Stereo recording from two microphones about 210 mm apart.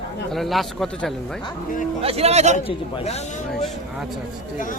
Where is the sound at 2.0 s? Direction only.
30° right (ahead or behind).